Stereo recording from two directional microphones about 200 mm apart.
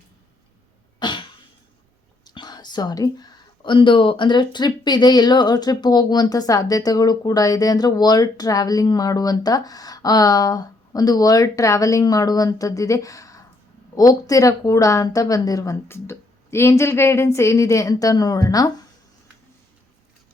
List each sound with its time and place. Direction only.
0.9 s cough: 25° left (ahead or behind)
2.2 s a woman's voice: 20° left (ahead or behind)